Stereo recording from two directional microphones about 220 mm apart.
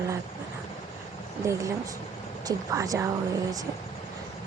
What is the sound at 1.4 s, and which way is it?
Speech, 15° right (ahead or behind).